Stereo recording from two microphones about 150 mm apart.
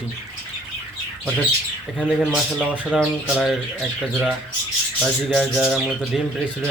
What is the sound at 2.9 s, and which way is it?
Bird, centre (ahead or behind).